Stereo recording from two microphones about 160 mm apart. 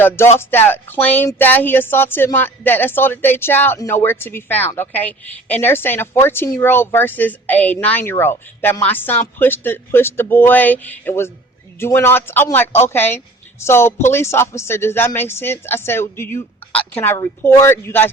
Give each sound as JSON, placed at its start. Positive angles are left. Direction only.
{"t": 0.3, "sound": "speech", "side_deg": 15}